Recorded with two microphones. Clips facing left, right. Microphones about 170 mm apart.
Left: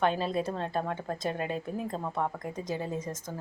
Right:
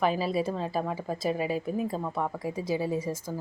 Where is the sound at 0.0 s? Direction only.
5° right (ahead or behind).